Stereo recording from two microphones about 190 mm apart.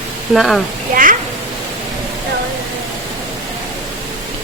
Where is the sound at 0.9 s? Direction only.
45° right (ahead or behind).